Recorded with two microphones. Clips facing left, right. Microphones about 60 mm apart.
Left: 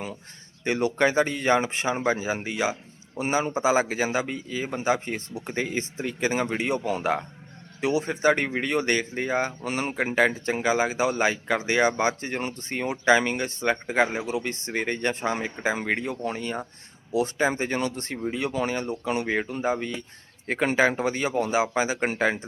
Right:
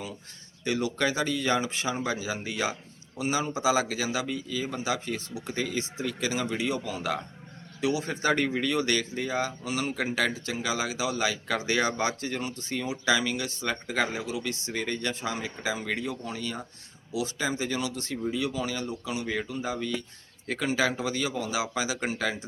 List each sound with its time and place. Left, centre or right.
0.6 s speech: left
3.2 s speech: left